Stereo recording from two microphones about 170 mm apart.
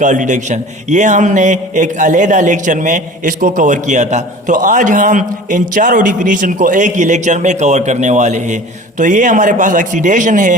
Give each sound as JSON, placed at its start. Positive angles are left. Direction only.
{"t": 0.0, "sound": "a man's voice", "side_deg": -45}